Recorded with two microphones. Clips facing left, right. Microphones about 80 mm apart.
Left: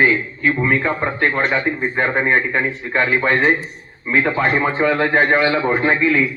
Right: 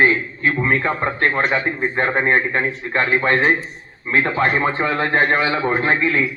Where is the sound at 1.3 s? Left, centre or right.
Centre.